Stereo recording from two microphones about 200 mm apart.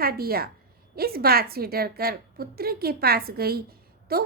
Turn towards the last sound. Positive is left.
turn(degrees=-50)  # may be behind; listen again after turning